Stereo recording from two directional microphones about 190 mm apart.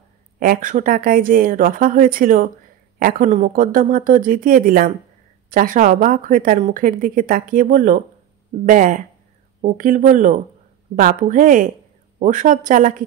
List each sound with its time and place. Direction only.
0.4 s a woman's voice: 45° right (ahead or behind)